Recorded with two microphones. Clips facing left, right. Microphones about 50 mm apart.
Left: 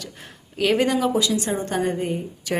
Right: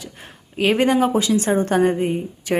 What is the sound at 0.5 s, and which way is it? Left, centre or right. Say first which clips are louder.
A woman's voice: right 3 dB; right.